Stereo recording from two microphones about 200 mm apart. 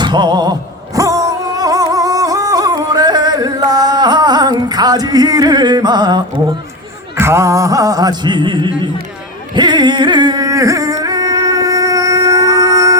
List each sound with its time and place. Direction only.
0.0 s music: 20° right (ahead or behind)
0.9 s a sound: 15° right (ahead or behind)
9.6 s music: 20° right (ahead or behind)